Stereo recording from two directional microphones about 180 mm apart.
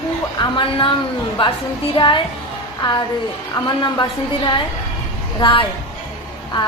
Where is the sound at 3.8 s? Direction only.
25° left (ahead or behind).